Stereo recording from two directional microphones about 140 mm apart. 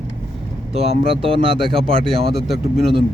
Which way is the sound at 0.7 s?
45° right (ahead or behind).